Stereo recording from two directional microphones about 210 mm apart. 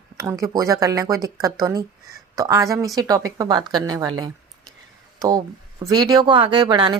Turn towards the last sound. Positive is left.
turn(degrees=-20)  # may be behind; listen again after turning